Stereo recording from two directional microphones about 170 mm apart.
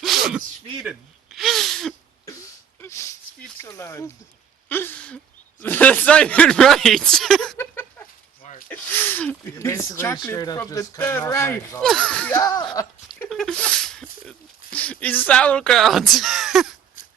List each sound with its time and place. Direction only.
0.0 s sneeze: centre (ahead or behind)
0.8 s gasp: centre (ahead or behind)
2.8 s a sound: 15° left (ahead or behind)
3.6 s speech: 20° left (ahead or behind)
4.7 s a sound: 10° left (ahead or behind)
5.6 s speech: 10° left (ahead or behind)
7.6 s a sound: 10° left (ahead or behind)
8.7 s speech: 10° left (ahead or behind)
11.8 s speech: 5° left (ahead or behind)